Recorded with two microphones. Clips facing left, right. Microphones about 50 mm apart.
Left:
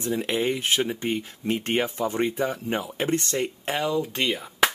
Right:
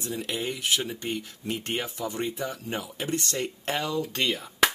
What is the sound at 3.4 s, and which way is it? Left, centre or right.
Speech, centre.